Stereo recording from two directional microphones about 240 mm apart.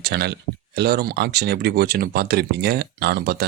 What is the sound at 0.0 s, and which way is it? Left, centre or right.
Speech, right.